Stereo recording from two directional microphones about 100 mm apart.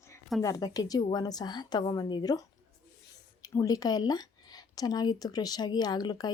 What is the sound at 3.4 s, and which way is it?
A woman's voice, 35° left (ahead or behind).